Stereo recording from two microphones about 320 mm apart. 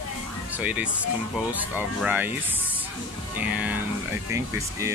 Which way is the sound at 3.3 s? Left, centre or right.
Centre.